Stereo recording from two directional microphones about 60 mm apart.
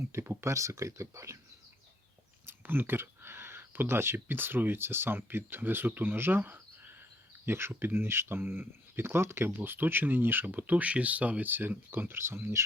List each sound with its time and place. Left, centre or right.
0.1 s speech: right
2.5 s speech: right